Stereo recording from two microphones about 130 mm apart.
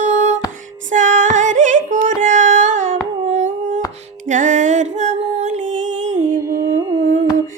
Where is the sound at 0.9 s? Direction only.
75° right (ahead or behind).